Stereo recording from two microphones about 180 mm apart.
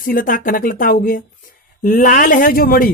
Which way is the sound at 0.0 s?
50° left (ahead or behind).